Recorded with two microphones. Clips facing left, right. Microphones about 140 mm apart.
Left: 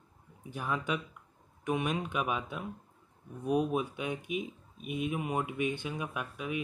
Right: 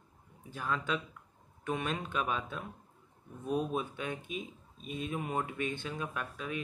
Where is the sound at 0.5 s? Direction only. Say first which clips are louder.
Left 1 dB; 15° left (ahead or behind).